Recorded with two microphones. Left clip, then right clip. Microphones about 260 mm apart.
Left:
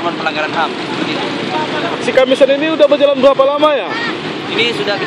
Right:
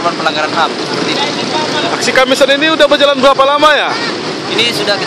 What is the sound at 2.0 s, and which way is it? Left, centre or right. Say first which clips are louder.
Speech: even; centre.